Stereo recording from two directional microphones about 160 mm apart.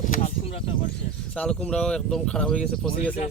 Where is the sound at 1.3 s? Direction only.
5° left (ahead or behind).